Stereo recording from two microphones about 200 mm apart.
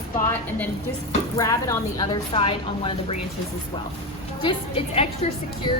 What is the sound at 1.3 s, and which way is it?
A woman's voice, 15° left (ahead or behind).